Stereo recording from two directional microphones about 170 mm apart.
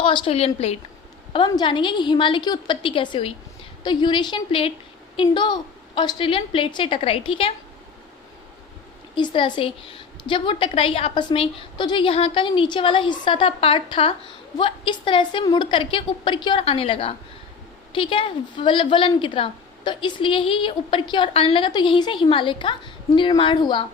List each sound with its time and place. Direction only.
0.0 s a woman's voice: 30° left (ahead or behind)
9.1 s a woman's voice: 30° left (ahead or behind)